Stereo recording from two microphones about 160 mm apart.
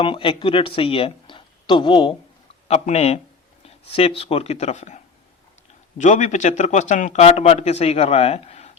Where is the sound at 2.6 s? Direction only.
40° left (ahead or behind).